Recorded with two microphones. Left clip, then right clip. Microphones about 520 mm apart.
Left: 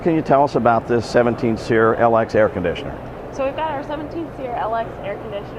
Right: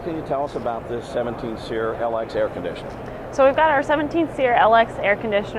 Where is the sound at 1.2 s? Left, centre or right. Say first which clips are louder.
Left 8 dB; left.